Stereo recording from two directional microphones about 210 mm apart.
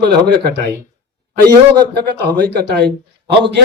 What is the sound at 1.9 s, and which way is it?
Speech, 50° right (ahead or behind).